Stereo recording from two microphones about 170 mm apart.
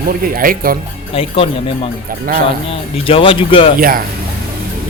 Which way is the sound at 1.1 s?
35° left (ahead or behind).